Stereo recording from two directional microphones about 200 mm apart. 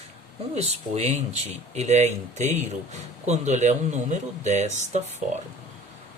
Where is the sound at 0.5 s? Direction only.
30° right (ahead or behind).